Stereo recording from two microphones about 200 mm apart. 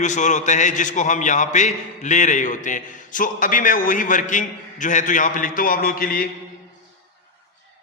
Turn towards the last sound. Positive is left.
turn(degrees=45)  # may be behind; listen again after turning